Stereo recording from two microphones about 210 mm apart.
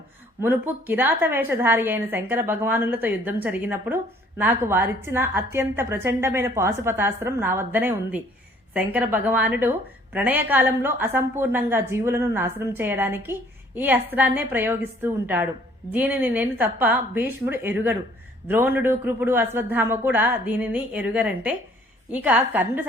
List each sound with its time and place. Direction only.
0.4 s a woman's voice: 10° right (ahead or behind)